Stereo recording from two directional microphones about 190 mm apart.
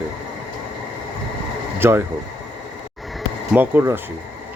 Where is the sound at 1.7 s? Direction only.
10° right (ahead or behind).